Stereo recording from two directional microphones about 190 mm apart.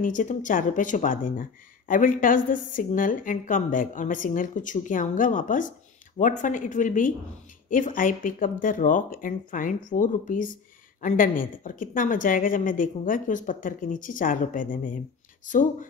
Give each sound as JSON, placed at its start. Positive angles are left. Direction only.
{"t": 0.0, "sound": "speech", "side_deg": 45}